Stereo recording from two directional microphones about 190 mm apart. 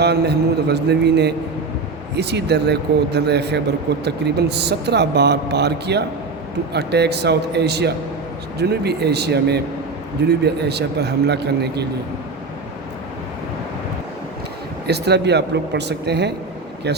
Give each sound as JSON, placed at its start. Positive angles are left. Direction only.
{"t": 0.0, "sound": "speech", "side_deg": -60}
{"t": 14.8, "sound": "speech", "side_deg": -60}